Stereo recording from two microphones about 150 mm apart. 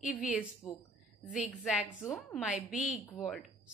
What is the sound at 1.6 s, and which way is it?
A woman's voice, 5° right (ahead or behind).